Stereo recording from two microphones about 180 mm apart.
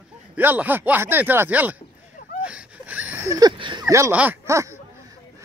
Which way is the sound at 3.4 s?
25° right (ahead or behind).